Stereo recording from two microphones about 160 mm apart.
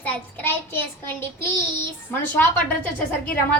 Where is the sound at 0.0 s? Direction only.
15° left (ahead or behind).